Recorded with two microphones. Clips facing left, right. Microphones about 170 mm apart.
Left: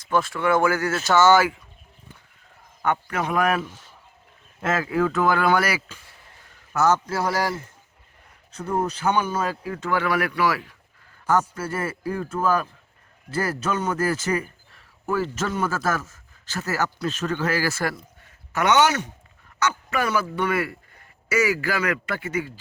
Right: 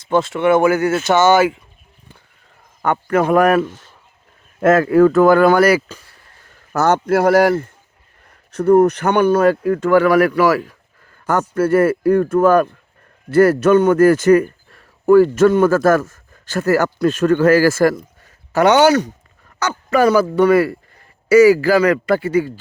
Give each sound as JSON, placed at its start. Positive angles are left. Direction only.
{"t": 0.0, "sound": "speech", "side_deg": -25}
{"t": 2.8, "sound": "speech", "side_deg": -50}
{"t": 6.7, "sound": "speech", "side_deg": -65}
{"t": 8.5, "sound": "speech", "side_deg": -70}
{"t": 11.3, "sound": "a man's voice", "side_deg": -60}